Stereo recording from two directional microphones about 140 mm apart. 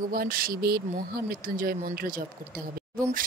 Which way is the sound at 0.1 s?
90° right.